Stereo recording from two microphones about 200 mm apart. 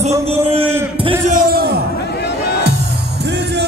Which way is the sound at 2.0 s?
55° left (ahead or behind).